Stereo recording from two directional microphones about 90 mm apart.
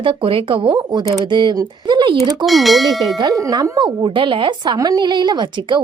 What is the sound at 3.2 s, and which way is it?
Tubular bells, 40° right (ahead or behind).